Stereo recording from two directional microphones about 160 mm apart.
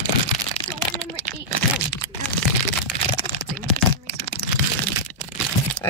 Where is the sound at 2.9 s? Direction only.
5° left (ahead or behind).